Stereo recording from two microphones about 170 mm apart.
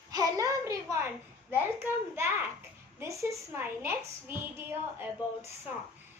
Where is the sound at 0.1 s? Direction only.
20° right (ahead or behind).